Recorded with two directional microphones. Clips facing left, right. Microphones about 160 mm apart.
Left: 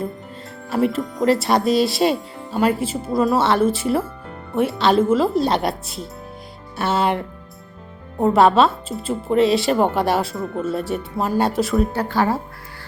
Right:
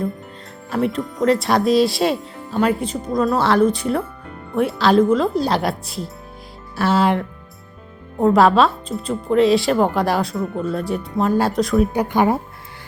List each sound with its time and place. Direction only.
0.7 s speech: centre (ahead or behind)
11.9 s speech: 15° right (ahead or behind)